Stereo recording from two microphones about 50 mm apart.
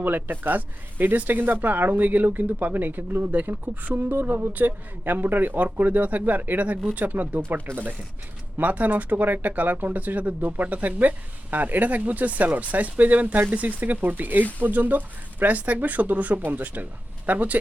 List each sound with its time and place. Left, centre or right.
0.0 s speech: right
8.5 s speech: right